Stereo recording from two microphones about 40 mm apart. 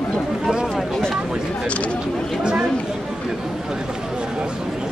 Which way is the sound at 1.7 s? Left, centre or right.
Left.